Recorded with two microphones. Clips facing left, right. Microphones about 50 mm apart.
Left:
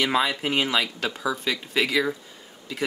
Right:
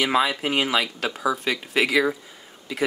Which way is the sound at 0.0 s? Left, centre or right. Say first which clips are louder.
Right 2 dB; centre.